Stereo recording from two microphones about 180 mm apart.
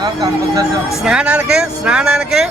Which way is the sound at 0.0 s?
20° right (ahead or behind).